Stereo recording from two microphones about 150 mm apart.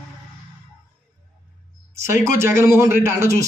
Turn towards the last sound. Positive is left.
turn(degrees=-20)  # may be behind; listen again after turning